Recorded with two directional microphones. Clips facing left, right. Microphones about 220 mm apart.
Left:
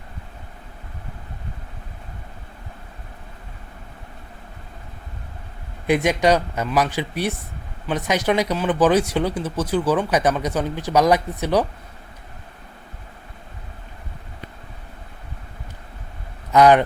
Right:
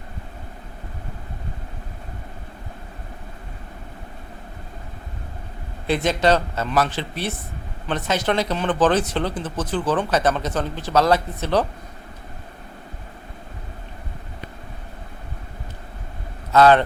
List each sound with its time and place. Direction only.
5.9 s speech: 15° left (ahead or behind)
16.5 s a man's voice: 15° left (ahead or behind)